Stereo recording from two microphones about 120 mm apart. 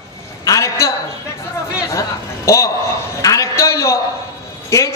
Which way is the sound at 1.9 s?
25° left (ahead or behind).